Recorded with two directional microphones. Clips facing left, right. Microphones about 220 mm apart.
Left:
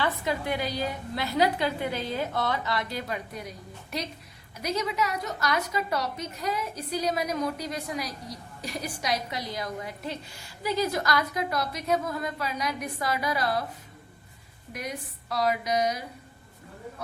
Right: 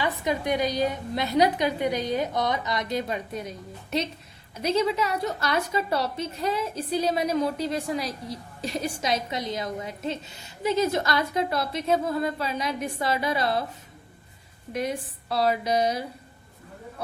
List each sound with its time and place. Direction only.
0.0 s a woman's voice: 15° right (ahead or behind)
14.7 s a woman's voice: 25° right (ahead or behind)